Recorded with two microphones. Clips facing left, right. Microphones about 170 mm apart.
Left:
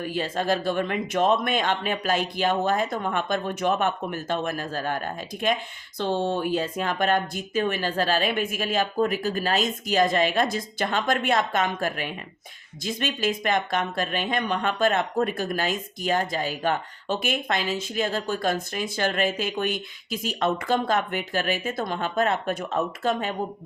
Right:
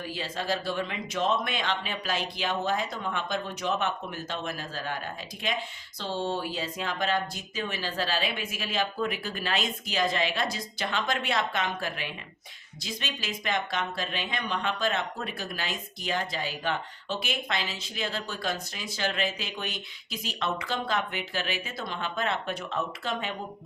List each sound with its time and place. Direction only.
0.0 s speech: 50° left (ahead or behind)